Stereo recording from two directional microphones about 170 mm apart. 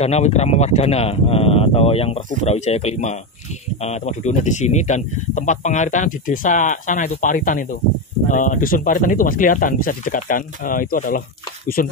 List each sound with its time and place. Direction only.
0.0 s speech: 40° left (ahead or behind); by 11.9 s 55° left (ahead or behind)